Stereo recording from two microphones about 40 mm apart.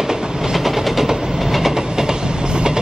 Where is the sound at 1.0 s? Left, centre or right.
Centre.